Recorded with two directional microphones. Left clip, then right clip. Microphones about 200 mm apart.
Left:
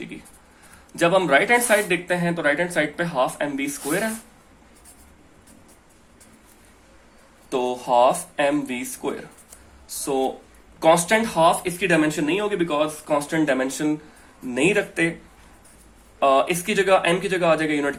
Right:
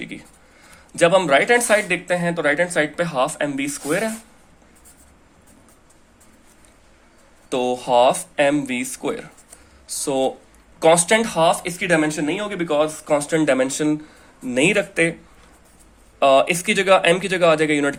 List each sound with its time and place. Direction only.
0.9 s speech: 30° right (ahead or behind)
7.5 s speech: 40° right (ahead or behind)
16.2 s speech: 40° right (ahead or behind)